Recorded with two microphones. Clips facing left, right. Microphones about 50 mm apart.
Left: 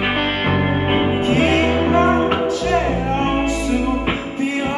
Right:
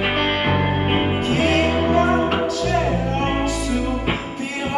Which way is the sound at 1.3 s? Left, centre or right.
Left.